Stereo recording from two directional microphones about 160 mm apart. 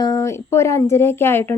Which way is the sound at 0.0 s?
20° left (ahead or behind).